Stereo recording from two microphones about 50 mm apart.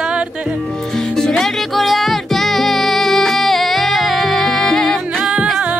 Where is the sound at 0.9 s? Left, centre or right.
Centre.